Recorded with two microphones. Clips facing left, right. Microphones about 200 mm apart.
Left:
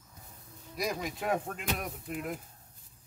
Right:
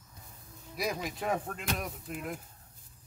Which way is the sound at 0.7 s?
Centre (ahead or behind).